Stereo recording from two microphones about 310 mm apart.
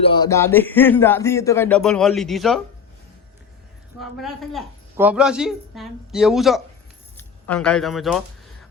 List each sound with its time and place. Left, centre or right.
0.0 s speech: centre
4.0 s a woman's voice: centre